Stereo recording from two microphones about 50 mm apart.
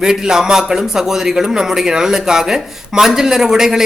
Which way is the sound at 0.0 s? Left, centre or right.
Centre.